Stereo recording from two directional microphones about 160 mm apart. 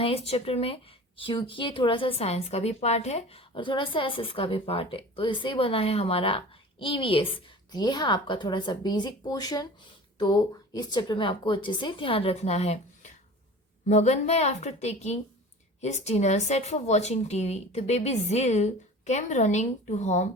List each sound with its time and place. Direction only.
0.0 s speech: 35° left (ahead or behind)